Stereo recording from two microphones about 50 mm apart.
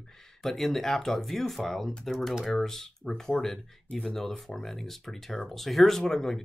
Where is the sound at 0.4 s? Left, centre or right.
Centre.